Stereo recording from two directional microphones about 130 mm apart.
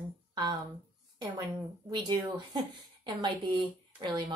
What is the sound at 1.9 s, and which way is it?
A woman's voice, 35° right (ahead or behind).